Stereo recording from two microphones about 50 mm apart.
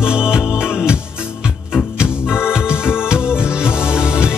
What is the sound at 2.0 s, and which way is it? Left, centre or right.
Music, centre.